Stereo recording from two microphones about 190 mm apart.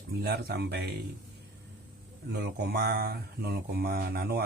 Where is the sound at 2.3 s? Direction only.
60° right (ahead or behind).